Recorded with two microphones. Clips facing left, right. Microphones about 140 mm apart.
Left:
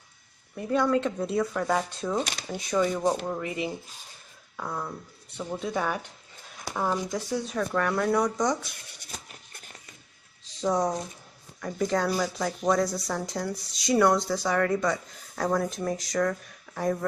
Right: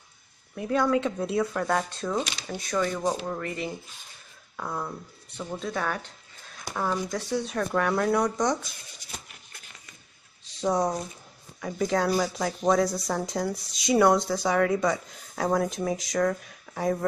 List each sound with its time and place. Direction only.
0.6 s speech: centre (ahead or behind)
4.6 s speech: 5° right (ahead or behind)
5.4 s speech: 10° left (ahead or behind)
9.1 s a sound: 40° left (ahead or behind)
10.6 s speech: 5° right (ahead or behind)
12.8 s speech: 15° right (ahead or behind)